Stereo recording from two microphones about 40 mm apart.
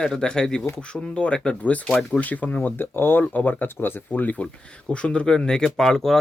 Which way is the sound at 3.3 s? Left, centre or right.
Left.